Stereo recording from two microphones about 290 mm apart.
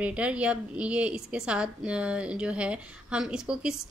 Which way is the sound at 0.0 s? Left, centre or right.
Centre.